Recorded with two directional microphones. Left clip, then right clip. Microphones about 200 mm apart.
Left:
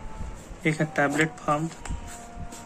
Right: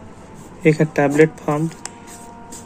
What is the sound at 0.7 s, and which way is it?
Speech, 20° right (ahead or behind).